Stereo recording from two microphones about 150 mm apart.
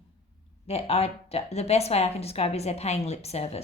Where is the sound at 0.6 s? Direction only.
45° left (ahead or behind).